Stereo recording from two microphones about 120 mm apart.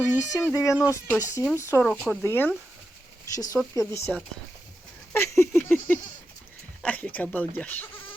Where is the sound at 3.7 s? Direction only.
25° left (ahead or behind).